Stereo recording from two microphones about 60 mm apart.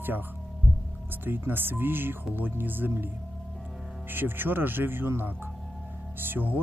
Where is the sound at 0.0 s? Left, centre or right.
Right.